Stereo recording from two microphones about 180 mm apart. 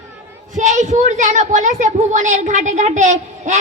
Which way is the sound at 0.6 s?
40° right (ahead or behind).